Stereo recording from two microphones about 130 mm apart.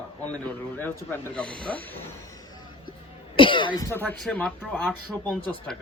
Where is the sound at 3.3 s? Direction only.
40° left (ahead or behind).